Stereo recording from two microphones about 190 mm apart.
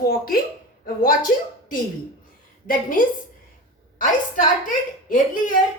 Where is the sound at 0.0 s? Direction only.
50° left (ahead or behind).